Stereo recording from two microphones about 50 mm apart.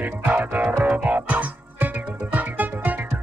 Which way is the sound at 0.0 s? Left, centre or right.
Right.